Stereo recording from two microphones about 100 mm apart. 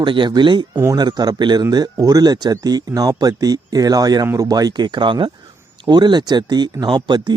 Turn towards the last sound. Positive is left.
turn(degrees=-45)  # may be behind; listen again after turning